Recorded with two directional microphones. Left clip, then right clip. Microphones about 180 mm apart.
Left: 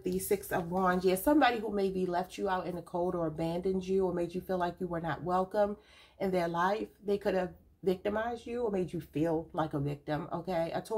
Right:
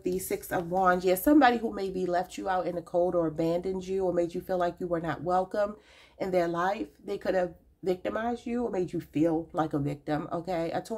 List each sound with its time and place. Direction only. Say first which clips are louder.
0.0 s a woman's voice: right 1 dB; 40° right (ahead or behind)